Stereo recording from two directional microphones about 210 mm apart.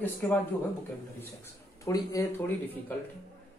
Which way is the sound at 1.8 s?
15° left (ahead or behind).